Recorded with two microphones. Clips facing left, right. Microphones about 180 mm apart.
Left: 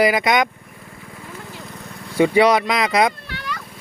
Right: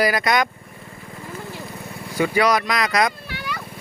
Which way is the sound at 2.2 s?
25° left (ahead or behind).